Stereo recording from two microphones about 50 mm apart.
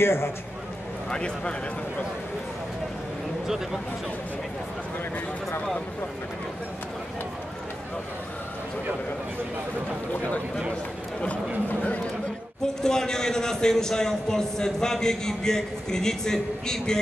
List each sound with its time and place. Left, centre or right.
0.0 s a man's voice: left
1.1 s a man's voice: centre
12.8 s a man's voice: centre